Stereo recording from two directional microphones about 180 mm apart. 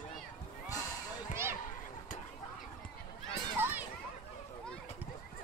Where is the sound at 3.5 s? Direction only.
10° right (ahead or behind).